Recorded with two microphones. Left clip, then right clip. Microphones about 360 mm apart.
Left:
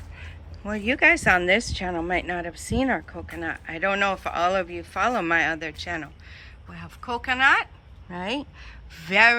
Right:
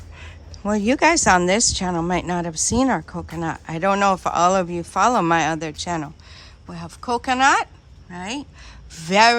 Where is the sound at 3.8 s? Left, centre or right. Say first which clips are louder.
Right 5 dB; centre.